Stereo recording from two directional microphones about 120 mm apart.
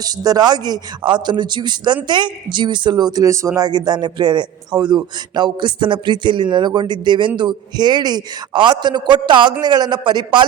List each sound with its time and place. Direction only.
0.0 s speech: 30° right (ahead or behind)